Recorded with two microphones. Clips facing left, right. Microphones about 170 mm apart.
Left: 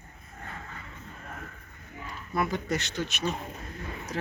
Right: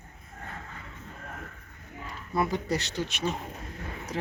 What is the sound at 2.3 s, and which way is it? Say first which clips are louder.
A woman's voice: right 1 dB; 30° right (ahead or behind).